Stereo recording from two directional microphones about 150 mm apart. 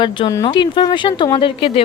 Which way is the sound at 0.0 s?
30° left (ahead or behind).